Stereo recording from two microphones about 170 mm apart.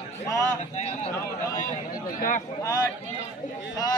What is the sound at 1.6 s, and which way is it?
Speech, 55° left (ahead or behind).